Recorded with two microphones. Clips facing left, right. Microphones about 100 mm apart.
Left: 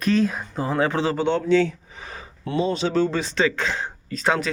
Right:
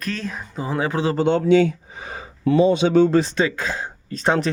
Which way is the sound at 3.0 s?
45° right (ahead or behind).